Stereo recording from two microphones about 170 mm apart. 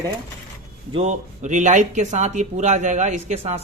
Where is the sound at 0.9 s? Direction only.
40° right (ahead or behind).